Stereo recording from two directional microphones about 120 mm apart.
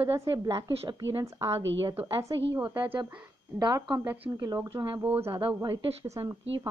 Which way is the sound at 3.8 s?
35° right (ahead or behind).